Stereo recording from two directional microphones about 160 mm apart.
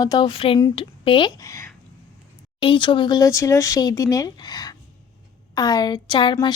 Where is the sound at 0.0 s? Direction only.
25° left (ahead or behind).